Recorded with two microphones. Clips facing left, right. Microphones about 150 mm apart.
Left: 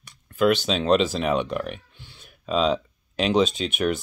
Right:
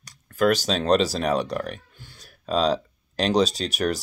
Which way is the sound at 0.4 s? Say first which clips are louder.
Even; 40° right (ahead or behind).